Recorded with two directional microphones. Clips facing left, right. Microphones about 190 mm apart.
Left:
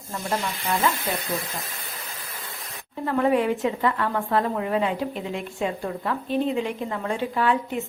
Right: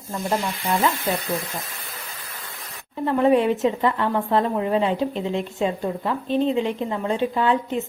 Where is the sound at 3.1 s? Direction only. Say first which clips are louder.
Right 3 dB; 20° right (ahead or behind).